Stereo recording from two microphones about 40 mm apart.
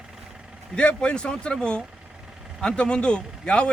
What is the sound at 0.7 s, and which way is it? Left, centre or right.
Speech, left.